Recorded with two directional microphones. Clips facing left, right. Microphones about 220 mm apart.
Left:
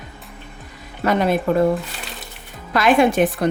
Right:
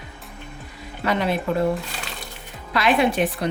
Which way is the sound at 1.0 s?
45° left (ahead or behind).